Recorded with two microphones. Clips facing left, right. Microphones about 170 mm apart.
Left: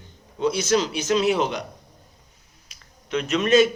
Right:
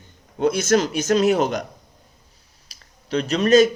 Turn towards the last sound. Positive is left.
turn(degrees=-40)  # may be behind; listen again after turning